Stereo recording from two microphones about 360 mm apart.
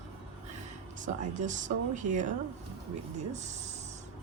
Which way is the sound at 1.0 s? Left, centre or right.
Right.